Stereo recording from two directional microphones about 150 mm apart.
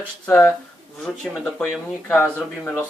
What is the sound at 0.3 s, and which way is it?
Speech, 10° left (ahead or behind).